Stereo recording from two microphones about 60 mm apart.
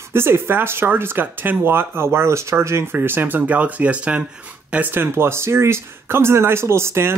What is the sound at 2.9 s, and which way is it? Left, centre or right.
Speech, right.